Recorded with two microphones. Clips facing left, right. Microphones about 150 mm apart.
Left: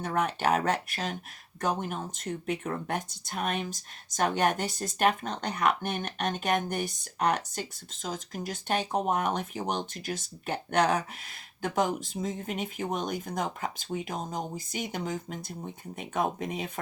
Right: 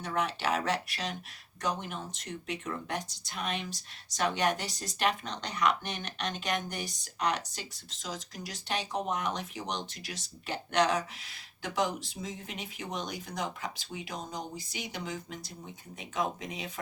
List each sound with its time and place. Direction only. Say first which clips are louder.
0.0 s speech: left 4 dB; 50° left (ahead or behind)